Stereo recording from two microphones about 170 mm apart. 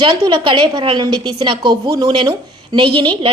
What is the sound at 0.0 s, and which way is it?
A woman's voice, 30° right (ahead or behind).